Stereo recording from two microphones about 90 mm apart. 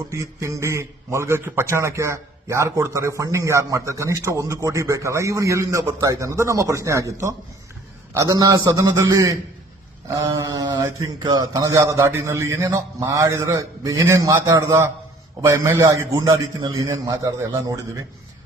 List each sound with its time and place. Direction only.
0.1 s a man's voice: 35° right (ahead or behind)
10.1 s a man's voice: 35° right (ahead or behind)